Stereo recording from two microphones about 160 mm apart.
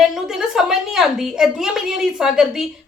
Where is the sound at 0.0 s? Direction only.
5° right (ahead or behind).